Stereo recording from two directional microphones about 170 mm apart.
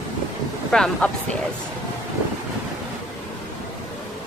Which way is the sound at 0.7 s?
5° left (ahead or behind).